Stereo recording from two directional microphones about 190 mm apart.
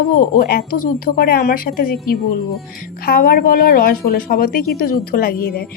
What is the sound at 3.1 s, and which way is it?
Speech, 50° left (ahead or behind).